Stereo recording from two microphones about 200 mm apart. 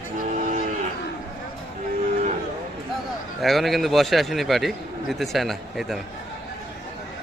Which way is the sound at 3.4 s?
Centre (ahead or behind).